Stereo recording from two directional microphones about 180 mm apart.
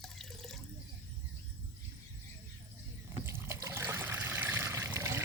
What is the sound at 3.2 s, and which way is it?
Water, 15° right (ahead or behind).